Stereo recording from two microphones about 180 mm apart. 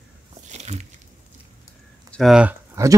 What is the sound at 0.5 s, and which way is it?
Biting, 40° right (ahead or behind).